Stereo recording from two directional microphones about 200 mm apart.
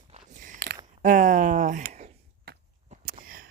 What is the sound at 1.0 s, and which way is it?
Speech, 40° right (ahead or behind).